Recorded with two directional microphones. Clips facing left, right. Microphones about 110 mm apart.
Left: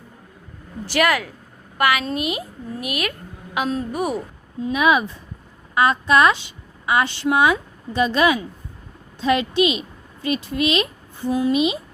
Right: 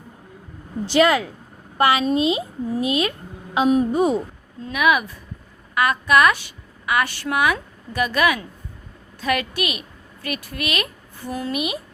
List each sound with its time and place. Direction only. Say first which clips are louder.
0.9 s a woman's voice: right 3 dB; 25° right (ahead or behind)
4.7 s a woman's voice: left 1 dB; 25° left (ahead or behind)